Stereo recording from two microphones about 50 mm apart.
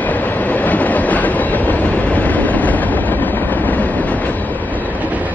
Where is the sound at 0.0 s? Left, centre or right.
Left.